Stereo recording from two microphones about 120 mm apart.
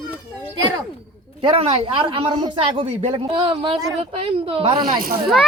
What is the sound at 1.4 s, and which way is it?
Speech, 55° right (ahead or behind).